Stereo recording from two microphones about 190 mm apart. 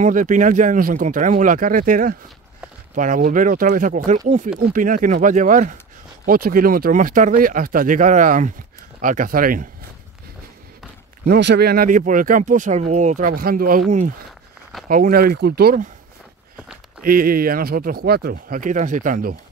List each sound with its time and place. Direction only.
0.0 s speech: 40° right (ahead or behind)
11.2 s speech: 60° right (ahead or behind)
17.0 s speech: 50° right (ahead or behind)